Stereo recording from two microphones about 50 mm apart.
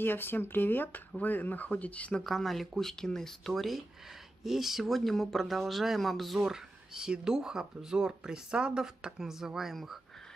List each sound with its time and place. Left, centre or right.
0.0 s speech: left
2.2 s speech: centre